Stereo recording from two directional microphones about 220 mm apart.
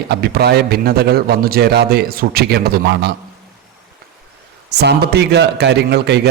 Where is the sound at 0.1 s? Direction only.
45° right (ahead or behind).